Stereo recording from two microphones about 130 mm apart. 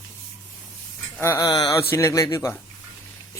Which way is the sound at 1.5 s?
35° left (ahead or behind).